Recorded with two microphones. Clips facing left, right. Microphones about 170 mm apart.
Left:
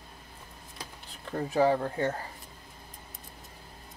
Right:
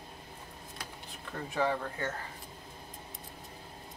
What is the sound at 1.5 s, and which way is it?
Speech, 35° left (ahead or behind).